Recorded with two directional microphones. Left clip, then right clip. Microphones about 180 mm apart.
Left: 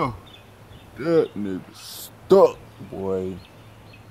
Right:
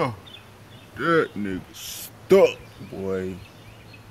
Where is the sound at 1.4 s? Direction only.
25° right (ahead or behind).